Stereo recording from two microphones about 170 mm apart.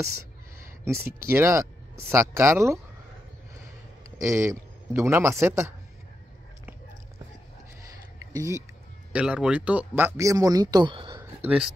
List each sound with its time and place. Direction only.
1.2 s speech: 15° right (ahead or behind)
4.2 s a man's voice: 15° right (ahead or behind)
8.3 s speech: 15° right (ahead or behind)
9.1 s speech: 5° right (ahead or behind); by 11.2 s 30° right (ahead or behind)
11.4 s speech: 5° right (ahead or behind)